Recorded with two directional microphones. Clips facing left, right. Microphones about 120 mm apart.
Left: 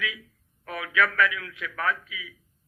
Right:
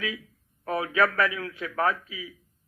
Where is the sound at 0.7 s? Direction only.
35° right (ahead or behind).